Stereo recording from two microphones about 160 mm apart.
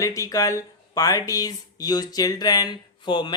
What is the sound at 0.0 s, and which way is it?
Speech, 20° left (ahead or behind).